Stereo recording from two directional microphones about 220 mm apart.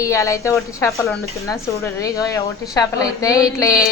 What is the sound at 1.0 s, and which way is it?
Speech, centre (ahead or behind).